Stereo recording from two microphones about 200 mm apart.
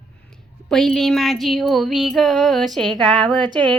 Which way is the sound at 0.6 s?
Centre (ahead or behind).